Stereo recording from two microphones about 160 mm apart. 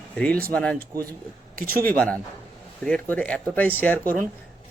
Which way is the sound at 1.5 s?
65° right (ahead or behind).